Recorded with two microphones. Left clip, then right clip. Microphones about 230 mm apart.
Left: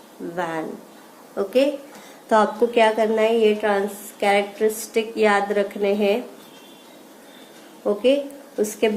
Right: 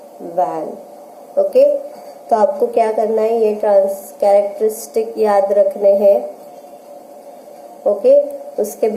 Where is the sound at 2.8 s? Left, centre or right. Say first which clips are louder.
Right 2 dB; left.